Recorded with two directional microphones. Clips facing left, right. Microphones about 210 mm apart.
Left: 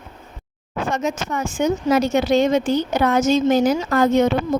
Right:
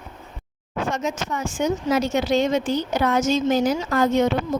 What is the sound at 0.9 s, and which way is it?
Speech, 60° left (ahead or behind).